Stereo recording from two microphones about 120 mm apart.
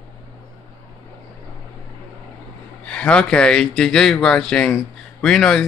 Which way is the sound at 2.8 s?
10° left (ahead or behind).